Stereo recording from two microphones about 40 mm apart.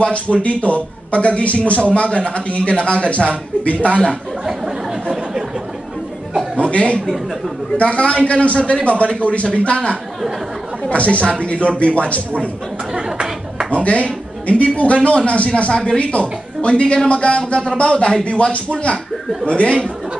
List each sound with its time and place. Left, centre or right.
0.1 s a man's voice: left
6.5 s chuckle: left
7.7 s a man's voice: left
12.9 s chatter: right
13.7 s speech: left
16.0 s a man's voice: left